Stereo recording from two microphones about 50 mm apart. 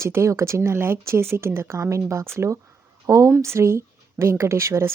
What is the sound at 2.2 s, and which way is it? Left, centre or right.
Speech, right.